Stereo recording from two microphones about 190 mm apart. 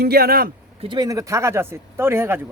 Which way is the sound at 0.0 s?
55° right (ahead or behind).